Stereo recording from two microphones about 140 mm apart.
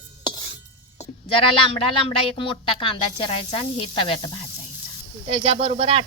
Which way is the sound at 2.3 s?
40° left (ahead or behind).